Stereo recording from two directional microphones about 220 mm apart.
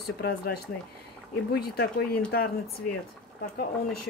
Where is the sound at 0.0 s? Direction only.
45° left (ahead or behind).